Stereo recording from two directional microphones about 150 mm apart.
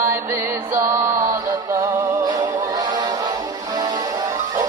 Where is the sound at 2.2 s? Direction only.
25° right (ahead or behind).